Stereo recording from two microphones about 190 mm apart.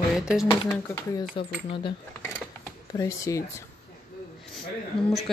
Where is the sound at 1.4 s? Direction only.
25° left (ahead or behind).